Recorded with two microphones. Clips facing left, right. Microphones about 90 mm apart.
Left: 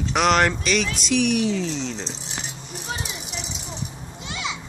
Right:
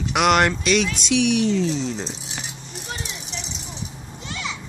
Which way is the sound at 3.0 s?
5° left (ahead or behind).